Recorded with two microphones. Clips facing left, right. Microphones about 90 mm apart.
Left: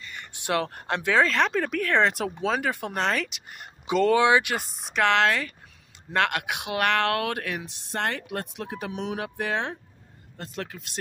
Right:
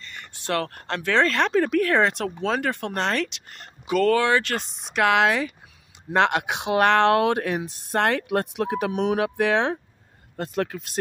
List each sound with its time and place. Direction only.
0.0 s speech: 15° left (ahead or behind)
1.2 s speech: centre (ahead or behind)
3.8 s speech: 20° left (ahead or behind)
4.6 s speech: centre (ahead or behind); by 9.8 s 70° right (ahead or behind)
10.3 s speech: 50° right (ahead or behind)